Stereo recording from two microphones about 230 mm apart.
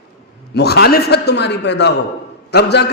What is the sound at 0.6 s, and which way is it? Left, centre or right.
Mantra, left.